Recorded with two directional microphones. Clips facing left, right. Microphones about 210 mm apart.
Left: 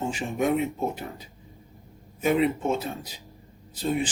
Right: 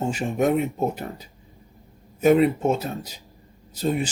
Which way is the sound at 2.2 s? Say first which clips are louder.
Right 6 dB; 40° right (ahead or behind).